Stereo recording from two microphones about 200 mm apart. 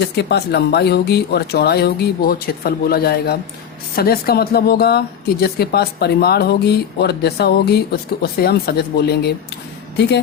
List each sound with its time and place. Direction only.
0.2 s speech: 55° left (ahead or behind)